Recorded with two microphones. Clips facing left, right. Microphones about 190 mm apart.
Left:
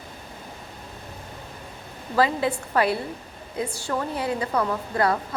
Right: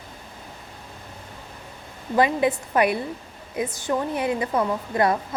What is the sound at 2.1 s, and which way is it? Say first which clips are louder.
A woman's voice: right 2 dB; 20° right (ahead or behind).